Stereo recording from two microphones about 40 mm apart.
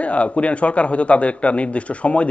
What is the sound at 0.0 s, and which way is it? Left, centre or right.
Speech, left.